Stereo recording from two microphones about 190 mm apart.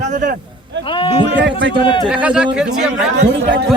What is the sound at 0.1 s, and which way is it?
Speech, 40° right (ahead or behind).